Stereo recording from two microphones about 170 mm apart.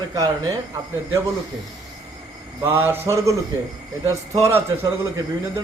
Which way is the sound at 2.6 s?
15° right (ahead or behind).